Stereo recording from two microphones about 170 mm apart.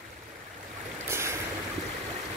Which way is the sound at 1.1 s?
15° right (ahead or behind).